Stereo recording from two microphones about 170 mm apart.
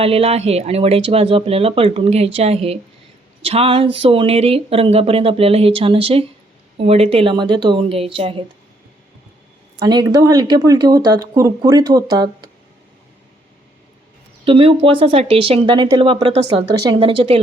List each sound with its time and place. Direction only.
0.0 s speech: 35° right (ahead or behind)
9.7 s speech: 25° right (ahead or behind)
14.4 s speech: 30° right (ahead or behind)